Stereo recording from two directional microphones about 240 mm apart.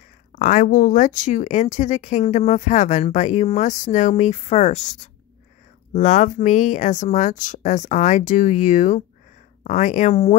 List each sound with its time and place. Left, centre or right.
0.3 s speech: left